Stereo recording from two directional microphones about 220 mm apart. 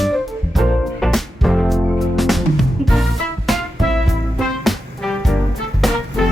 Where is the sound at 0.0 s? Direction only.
Centre (ahead or behind).